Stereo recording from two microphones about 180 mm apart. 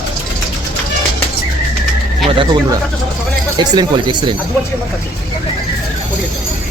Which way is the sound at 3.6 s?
25° right (ahead or behind).